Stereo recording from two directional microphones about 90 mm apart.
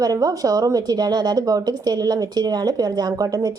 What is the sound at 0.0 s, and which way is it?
A woman's voice, 45° right (ahead or behind).